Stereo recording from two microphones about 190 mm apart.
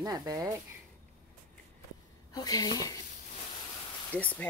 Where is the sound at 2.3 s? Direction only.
20° left (ahead or behind).